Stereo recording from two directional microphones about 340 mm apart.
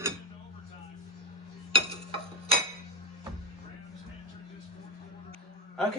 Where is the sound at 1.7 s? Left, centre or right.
Centre.